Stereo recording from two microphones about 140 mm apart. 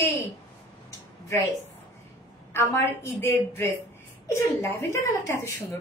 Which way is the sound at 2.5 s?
20° left (ahead or behind).